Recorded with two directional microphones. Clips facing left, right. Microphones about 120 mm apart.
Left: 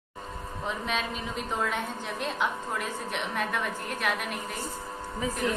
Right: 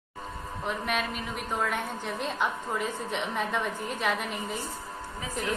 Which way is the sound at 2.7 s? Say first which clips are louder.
Right 2 dB; 20° right (ahead or behind).